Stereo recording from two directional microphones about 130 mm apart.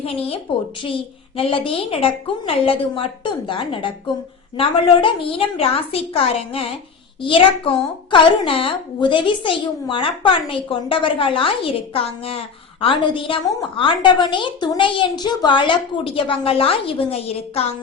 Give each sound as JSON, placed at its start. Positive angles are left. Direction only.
{"t": 0.0, "sound": "a woman's voice", "side_deg": 50}